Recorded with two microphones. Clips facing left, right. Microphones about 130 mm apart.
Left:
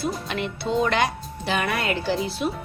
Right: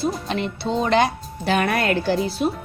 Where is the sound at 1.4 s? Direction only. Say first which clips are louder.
Right 5 dB; 50° right (ahead or behind).